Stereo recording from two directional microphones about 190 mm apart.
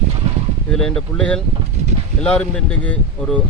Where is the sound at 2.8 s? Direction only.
5° left (ahead or behind).